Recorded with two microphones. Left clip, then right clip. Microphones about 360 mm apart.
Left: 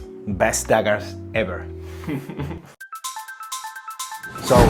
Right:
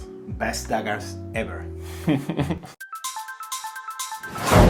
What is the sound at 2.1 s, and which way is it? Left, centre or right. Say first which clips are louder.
Speech: right 6 dB; right.